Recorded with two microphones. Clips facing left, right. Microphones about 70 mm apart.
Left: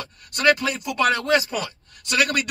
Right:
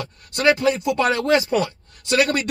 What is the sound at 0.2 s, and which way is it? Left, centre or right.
Speech, right.